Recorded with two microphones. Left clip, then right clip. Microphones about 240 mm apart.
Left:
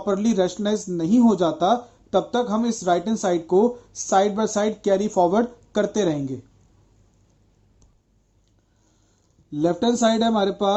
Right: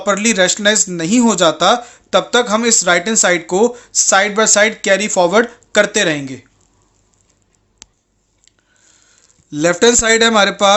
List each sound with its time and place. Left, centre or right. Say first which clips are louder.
0.3 s speech: right 12 dB; right
9.5 s speech: right 10 dB; right